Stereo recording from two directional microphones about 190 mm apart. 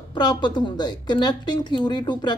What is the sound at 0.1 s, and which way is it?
Speech, 20° left (ahead or behind).